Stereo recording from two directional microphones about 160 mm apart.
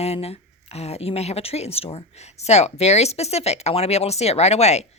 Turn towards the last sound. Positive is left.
turn(degrees=45)  # may be behind; listen again after turning